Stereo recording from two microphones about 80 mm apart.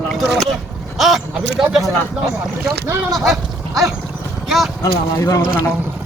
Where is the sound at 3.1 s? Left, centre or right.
Centre.